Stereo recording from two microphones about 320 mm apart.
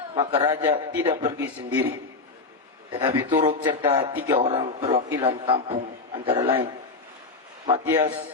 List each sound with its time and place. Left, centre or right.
0.1 s a man's voice: centre
2.9 s a man's voice: centre
3.6 s a man's voice: centre
3.8 s a man's voice: centre
7.7 s a man's voice: centre